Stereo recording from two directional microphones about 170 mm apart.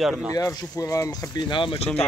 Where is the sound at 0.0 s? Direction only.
Centre (ahead or behind).